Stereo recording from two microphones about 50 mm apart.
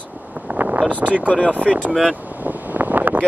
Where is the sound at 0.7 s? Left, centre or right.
Right.